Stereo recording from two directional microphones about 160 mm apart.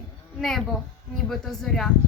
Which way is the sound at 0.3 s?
Centre (ahead or behind).